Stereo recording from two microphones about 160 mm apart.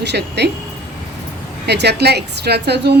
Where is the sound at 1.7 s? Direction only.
90° right.